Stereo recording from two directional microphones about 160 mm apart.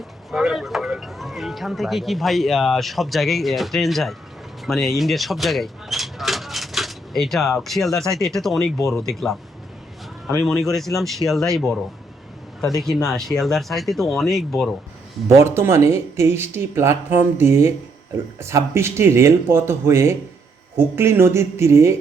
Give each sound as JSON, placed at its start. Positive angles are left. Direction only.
{"t": 0.3, "sound": "speech", "side_deg": 0}
{"t": 10.2, "sound": "speech", "side_deg": 5}
{"t": 12.6, "sound": "speech", "side_deg": 0}
{"t": 15.4, "sound": "speech", "side_deg": -15}